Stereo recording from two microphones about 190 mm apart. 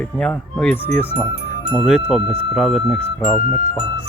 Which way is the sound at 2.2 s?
30° right (ahead or behind).